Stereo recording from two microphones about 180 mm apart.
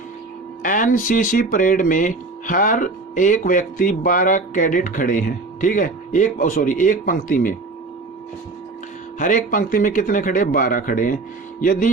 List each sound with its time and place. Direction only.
0.6 s speech: 45° left (ahead or behind)
9.1 s speech: 45° left (ahead or behind)